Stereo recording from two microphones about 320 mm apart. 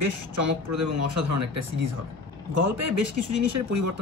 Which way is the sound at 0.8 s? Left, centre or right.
Right.